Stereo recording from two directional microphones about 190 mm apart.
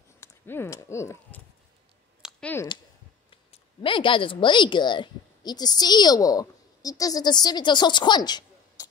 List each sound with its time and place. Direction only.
0.2 s speech: 15° left (ahead or behind)
2.4 s speech: 10° left (ahead or behind)
3.3 s a woman's voice: 25° left (ahead or behind)